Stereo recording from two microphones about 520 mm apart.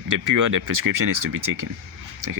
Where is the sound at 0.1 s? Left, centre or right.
Right.